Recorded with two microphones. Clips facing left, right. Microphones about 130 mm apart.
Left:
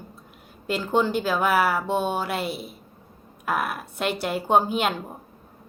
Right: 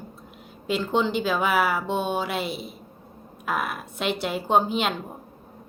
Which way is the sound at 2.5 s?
55° left (ahead or behind).